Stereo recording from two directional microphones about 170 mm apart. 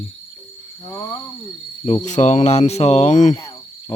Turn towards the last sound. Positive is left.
turn(degrees=25)  # may be behind; listen again after turning